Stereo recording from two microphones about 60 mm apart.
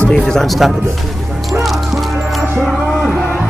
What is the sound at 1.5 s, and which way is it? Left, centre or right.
Music, centre.